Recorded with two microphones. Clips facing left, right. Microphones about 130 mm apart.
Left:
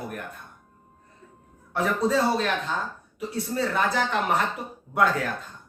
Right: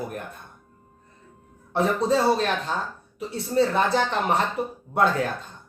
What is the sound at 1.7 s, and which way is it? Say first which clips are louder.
Speech: right 2 dB; 30° right (ahead or behind).